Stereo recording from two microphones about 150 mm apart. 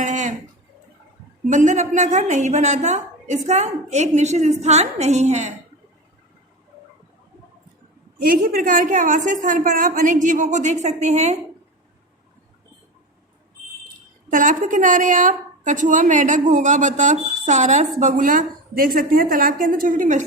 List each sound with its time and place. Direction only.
0.0 s a sound: 55° right (ahead or behind)
1.5 s a woman's voice: 55° right (ahead or behind)
8.2 s a woman's voice: 75° right (ahead or behind); by 11.3 s 50° right (ahead or behind)
13.8 s a woman's voice: 60° right (ahead or behind)